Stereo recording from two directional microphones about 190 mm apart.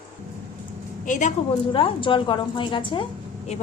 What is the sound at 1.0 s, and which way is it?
Speech, 40° left (ahead or behind).